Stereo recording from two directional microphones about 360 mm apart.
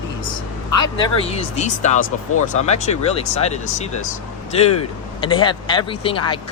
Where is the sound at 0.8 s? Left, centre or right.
Centre.